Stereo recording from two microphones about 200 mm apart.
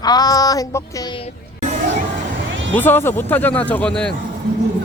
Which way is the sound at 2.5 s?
70° right (ahead or behind).